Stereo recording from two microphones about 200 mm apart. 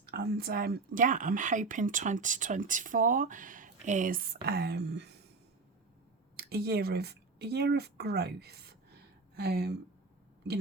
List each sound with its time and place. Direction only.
0.0 s a woman's voice: 50° right (ahead or behind)
6.3 s speech: 50° right (ahead or behind)